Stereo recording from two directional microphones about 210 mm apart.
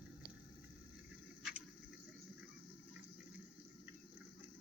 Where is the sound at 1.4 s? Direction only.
5° right (ahead or behind).